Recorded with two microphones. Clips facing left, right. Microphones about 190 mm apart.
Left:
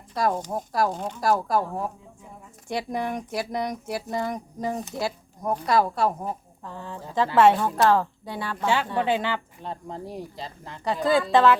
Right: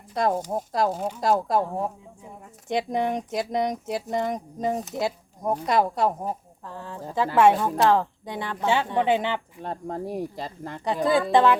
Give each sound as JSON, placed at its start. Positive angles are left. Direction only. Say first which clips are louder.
{"t": 0.1, "sound": "speech", "louder": "right 1 dB", "side_deg": -20}
{"t": 0.9, "sound": "a woman's voice", "louder": "right 3 dB", "side_deg": -5}
{"t": 1.2, "sound": "speech", "louder": "even", "side_deg": -25}
{"t": 6.7, "sound": "a woman's voice", "louder": "right 1 dB", "side_deg": -5}
{"t": 9.6, "sound": "speech", "louder": "right 4 dB", "side_deg": -50}
{"t": 10.8, "sound": "a woman's voice", "louder": "even", "side_deg": -20}